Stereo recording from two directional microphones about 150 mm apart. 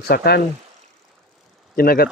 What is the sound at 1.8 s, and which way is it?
Speech, 85° left.